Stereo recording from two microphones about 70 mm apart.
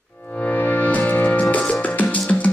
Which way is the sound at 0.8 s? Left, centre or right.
Left.